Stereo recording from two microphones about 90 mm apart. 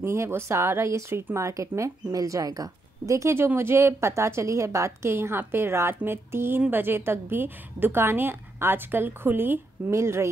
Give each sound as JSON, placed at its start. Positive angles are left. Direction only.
{"t": 0.0, "sound": "a woman's voice", "side_deg": -30}